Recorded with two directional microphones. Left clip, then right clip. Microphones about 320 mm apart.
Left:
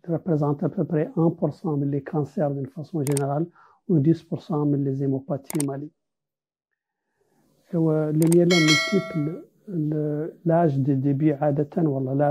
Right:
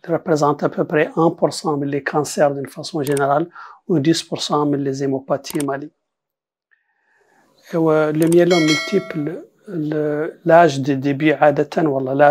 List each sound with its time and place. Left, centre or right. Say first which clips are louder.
0.0 s speech: right 9 dB; centre
7.6 s a sound: right 8 dB; centre
9.2 s speech: right 5 dB; centre